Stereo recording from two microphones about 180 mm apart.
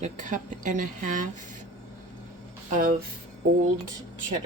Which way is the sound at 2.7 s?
50° right (ahead or behind).